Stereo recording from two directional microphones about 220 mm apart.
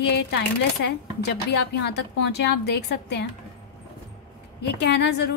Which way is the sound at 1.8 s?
50° left (ahead or behind).